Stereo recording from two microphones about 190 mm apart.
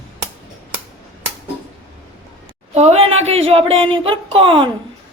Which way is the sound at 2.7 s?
35° right (ahead or behind).